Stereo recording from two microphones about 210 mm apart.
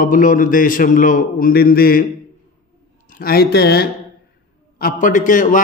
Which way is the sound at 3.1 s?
45° left (ahead or behind).